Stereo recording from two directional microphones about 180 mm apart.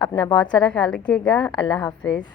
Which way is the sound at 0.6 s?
5° left (ahead or behind).